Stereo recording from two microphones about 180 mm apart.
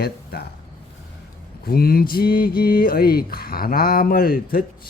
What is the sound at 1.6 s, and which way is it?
Speech, 55° left (ahead or behind).